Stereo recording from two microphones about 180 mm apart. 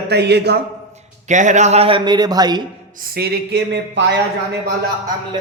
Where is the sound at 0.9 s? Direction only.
40° right (ahead or behind); by 2.6 s 20° right (ahead or behind).